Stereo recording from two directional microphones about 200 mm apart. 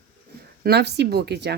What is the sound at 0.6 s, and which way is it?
Speech, 55° right (ahead or behind).